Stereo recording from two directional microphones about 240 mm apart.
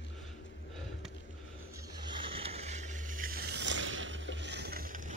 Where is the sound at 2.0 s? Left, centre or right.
Centre.